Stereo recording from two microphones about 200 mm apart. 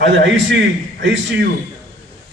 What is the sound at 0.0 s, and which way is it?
Speech, 65° right (ahead or behind).